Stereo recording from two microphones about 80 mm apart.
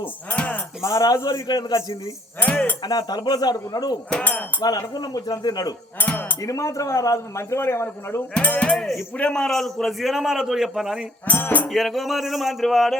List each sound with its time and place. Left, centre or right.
0.3 s a sound: centre
0.8 s speech: left
2.4 s speech: centre
2.8 s speech: left
4.2 s speech: left
4.6 s speech: left
6.0 s cutlery: left
6.4 s a man's voice: left
8.3 s a man's voice: centre
11.3 s music: left
11.7 s a man's voice: centre